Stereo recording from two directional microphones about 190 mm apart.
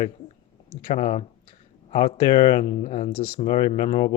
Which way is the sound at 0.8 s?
35° left (ahead or behind).